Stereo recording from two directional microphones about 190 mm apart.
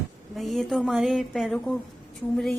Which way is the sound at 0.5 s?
Centre (ahead or behind).